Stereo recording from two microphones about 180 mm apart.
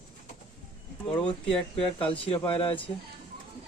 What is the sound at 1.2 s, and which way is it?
Speech, 30° left (ahead or behind).